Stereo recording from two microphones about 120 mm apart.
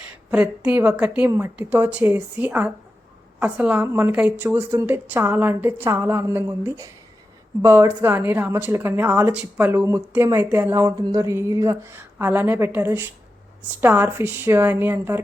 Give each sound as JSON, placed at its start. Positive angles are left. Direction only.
{"t": 0.3, "sound": "a woman's voice", "side_deg": -10}